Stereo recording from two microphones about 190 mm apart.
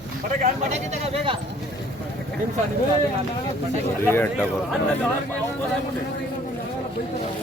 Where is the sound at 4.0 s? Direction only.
10° left (ahead or behind).